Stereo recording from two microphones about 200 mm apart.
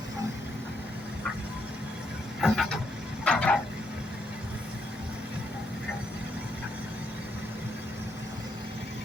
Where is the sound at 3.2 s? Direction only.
5° left (ahead or behind).